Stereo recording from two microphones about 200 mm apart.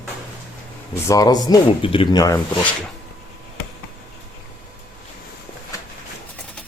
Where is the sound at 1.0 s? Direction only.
15° left (ahead or behind).